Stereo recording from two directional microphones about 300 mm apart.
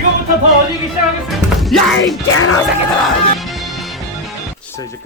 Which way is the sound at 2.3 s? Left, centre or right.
Left.